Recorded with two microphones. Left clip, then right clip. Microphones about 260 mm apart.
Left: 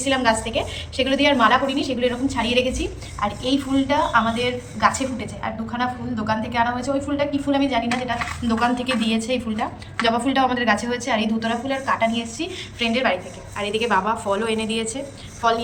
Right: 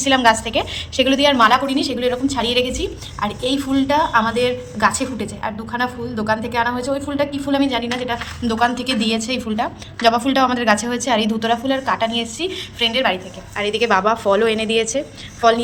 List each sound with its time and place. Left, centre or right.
0.0 s a woman's voice: centre